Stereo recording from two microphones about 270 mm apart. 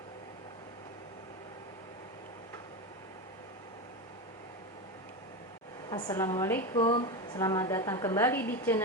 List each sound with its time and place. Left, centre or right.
5.9 s a woman's voice: centre